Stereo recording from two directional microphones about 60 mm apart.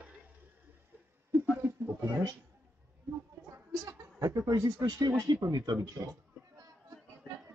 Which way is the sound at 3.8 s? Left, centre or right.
Right.